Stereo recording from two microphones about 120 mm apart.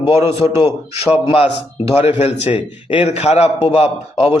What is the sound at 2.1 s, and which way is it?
A man's voice, 55° left (ahead or behind).